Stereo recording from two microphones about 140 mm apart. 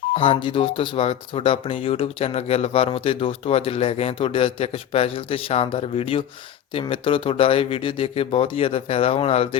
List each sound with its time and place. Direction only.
0.1 s speech: 40° left (ahead or behind)